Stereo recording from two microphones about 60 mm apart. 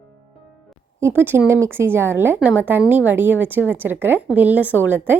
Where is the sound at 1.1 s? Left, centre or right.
Right.